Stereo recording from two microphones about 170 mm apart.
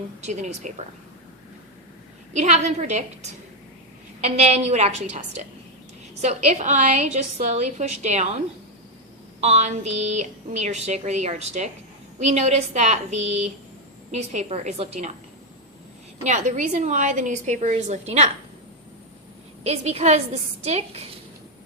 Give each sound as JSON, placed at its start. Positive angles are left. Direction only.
{"t": 0.2, "sound": "a woman's voice", "side_deg": -45}
{"t": 2.3, "sound": "a woman's voice", "side_deg": -40}
{"t": 9.4, "sound": "a woman's voice", "side_deg": -40}
{"t": 16.2, "sound": "a woman's voice", "side_deg": -45}
{"t": 19.6, "sound": "a woman's voice", "side_deg": -40}